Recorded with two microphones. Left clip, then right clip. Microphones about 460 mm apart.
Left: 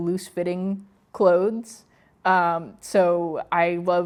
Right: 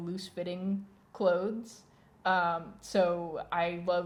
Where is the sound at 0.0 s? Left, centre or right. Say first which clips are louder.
Left 12 dB; left.